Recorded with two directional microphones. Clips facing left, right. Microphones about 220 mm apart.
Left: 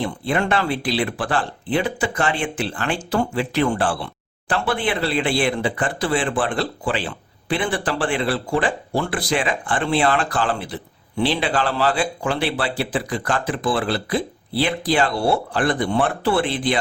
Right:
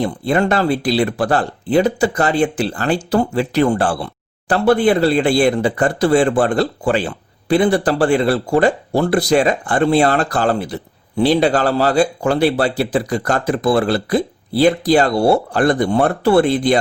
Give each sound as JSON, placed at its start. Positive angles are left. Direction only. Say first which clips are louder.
{"t": 0.0, "sound": "speech", "louder": "right 5 dB", "side_deg": -40}